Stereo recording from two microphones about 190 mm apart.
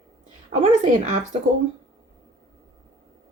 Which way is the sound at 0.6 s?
40° right (ahead or behind).